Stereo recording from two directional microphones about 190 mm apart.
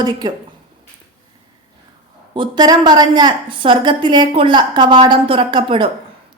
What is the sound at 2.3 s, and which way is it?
A woman's voice, 25° right (ahead or behind).